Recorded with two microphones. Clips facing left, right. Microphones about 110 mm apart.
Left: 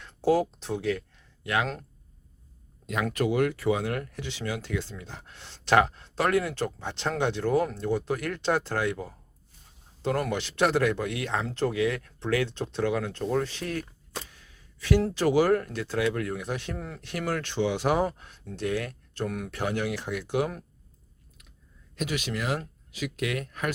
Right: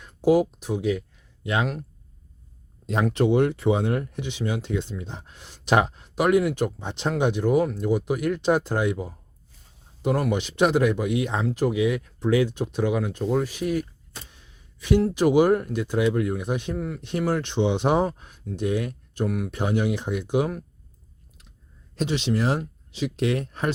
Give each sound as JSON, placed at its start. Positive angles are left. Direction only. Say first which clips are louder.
{"t": 0.0, "sound": "speech", "louder": "right 4 dB", "side_deg": -15}
{"t": 2.8, "sound": "speech", "louder": "right 5 dB", "side_deg": -30}
{"t": 14.3, "sound": "a sound", "louder": "right 1 dB", "side_deg": -20}
{"t": 15.1, "sound": "speech", "louder": "right 4 dB", "side_deg": -15}
{"t": 16.7, "sound": "speech", "louder": "right 8 dB", "side_deg": 0}
{"t": 17.0, "sound": "speech", "louder": "right 5 dB", "side_deg": -20}
{"t": 21.9, "sound": "speech", "louder": "right 6 dB", "side_deg": -25}